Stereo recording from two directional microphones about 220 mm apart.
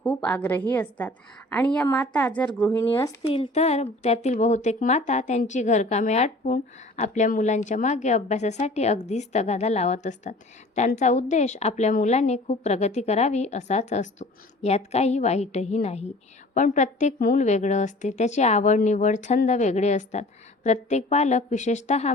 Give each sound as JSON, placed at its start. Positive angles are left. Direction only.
{"t": 0.0, "sound": "a woman's voice", "side_deg": 5}
{"t": 3.2, "sound": "speech", "side_deg": 25}